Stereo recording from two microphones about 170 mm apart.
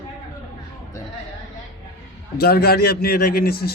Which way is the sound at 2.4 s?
65° left (ahead or behind).